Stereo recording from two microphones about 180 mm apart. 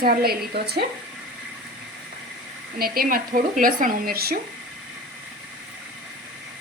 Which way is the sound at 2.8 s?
55° right (ahead or behind).